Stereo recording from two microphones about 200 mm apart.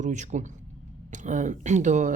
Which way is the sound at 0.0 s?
35° right (ahead or behind).